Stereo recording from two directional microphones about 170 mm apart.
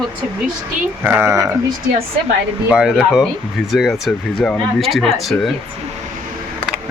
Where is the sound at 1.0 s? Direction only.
15° right (ahead or behind).